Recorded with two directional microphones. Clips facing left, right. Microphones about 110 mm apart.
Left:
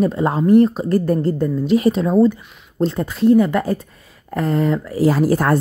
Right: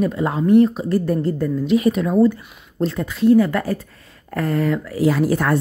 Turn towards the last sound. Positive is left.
turn(degrees=40)  # may be behind; listen again after turning